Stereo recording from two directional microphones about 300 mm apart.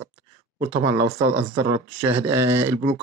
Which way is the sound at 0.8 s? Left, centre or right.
Centre.